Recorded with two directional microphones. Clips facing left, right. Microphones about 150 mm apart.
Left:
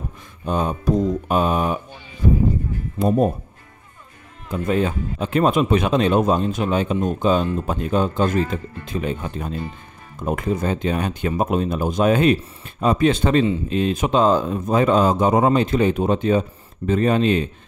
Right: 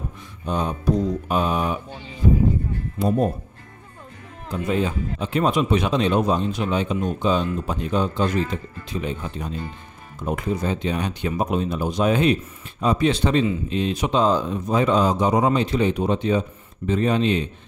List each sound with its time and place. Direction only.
0.5 s speech: 50° left (ahead or behind)
3.0 s speech: 50° left (ahead or behind)
4.5 s speech: 55° left (ahead or behind)